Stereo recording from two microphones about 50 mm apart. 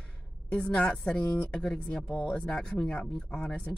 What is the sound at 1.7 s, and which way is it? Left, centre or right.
Speech, centre.